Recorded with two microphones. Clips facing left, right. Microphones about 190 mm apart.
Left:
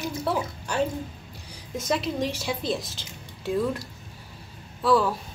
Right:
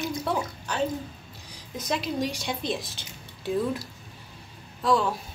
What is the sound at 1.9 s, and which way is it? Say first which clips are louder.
A woman's voice: left 2 dB; centre (ahead or behind).